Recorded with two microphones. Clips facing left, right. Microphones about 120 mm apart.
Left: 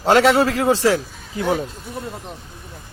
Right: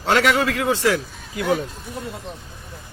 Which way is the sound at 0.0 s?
35° left (ahead or behind).